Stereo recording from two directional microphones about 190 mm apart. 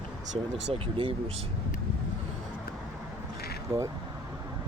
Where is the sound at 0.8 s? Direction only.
30° right (ahead or behind).